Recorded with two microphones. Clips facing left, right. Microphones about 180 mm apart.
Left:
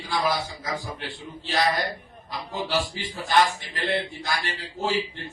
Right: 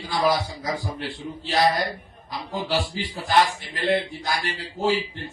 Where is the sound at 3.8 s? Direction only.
45° right (ahead or behind).